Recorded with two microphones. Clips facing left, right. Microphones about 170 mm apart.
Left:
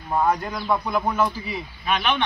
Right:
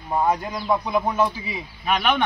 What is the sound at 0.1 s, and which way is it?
Speech, 15° right (ahead or behind).